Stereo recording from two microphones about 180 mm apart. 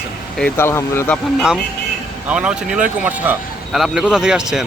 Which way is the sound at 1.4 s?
Centre (ahead or behind).